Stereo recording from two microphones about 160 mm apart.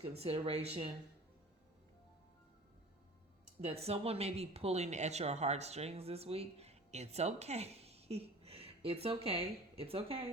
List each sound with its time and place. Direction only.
0.2 s speech: 40° right (ahead or behind)
3.6 s speech: 40° right (ahead or behind)